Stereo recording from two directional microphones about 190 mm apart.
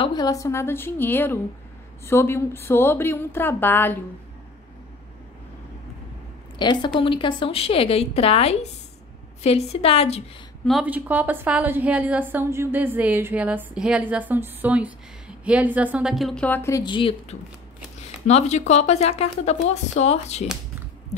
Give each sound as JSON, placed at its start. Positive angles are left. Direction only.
{"t": 0.0, "sound": "a woman's voice", "side_deg": 20}
{"t": 6.6, "sound": "speech", "side_deg": 25}
{"t": 10.6, "sound": "a woman's voice", "side_deg": -5}